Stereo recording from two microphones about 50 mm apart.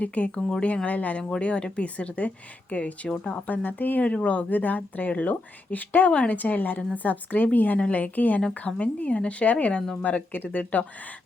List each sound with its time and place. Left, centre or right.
0.0 s speech: left
0.9 s speech: left
1.4 s speech: left
4.0 s speech: left
6.1 s speech: left
6.3 s speech: left